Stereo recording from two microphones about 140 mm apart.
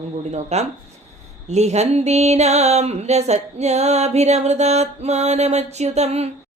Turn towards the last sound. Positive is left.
turn(degrees=-50)  # may be behind; listen again after turning